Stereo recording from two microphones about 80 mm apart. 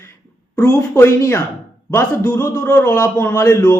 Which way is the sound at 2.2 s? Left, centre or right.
Left.